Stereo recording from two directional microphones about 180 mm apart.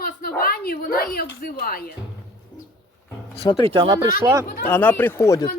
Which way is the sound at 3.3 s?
30° left (ahead or behind).